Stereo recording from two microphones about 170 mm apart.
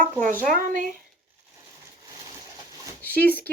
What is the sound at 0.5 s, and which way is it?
Speech, 55° right (ahead or behind).